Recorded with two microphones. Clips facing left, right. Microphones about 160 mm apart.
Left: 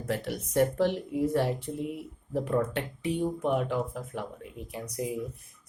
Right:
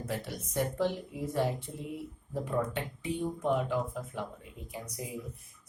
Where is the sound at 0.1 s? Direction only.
70° left (ahead or behind).